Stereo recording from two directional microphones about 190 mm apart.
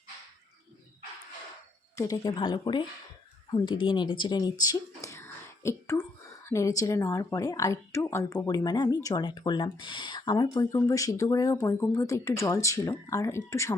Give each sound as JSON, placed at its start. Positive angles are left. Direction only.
{"t": 2.0, "sound": "speech", "side_deg": 15}